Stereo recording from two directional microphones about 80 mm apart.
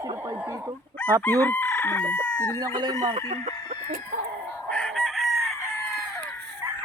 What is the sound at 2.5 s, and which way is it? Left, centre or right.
Speech, right.